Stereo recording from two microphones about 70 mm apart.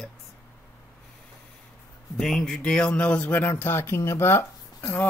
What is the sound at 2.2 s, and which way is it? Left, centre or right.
Speech, centre.